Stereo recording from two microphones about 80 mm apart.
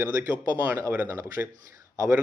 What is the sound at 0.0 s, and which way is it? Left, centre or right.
A man's voice, right.